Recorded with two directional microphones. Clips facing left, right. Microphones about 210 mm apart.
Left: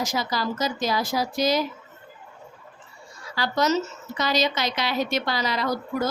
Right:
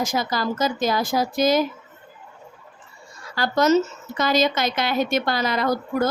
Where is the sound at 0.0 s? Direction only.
50° right (ahead or behind).